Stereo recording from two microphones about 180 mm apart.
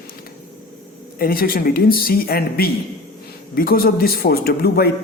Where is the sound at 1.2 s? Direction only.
55° left (ahead or behind).